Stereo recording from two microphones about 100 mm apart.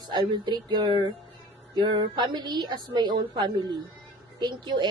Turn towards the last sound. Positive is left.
turn(degrees=-50)  # may be behind; listen again after turning